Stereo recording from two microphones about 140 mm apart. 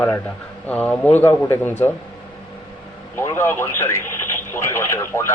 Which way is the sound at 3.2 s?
20° left (ahead or behind).